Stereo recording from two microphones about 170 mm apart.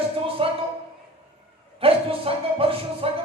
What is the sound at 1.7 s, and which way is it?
A man's voice, 35° right (ahead or behind).